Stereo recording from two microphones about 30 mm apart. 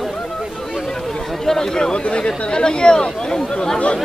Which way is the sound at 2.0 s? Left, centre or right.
Left.